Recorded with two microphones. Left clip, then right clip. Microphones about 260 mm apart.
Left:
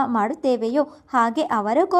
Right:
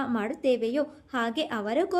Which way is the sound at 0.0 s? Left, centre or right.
Centre.